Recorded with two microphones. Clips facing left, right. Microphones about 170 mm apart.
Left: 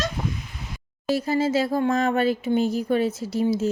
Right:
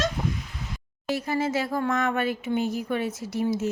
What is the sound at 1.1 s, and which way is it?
A woman's voice, 30° left (ahead or behind).